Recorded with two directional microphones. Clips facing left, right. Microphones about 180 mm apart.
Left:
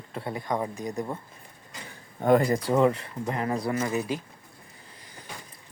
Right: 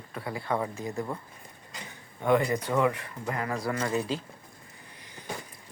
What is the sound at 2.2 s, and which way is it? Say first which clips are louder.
Speech: left 3 dB; 40° left (ahead or behind).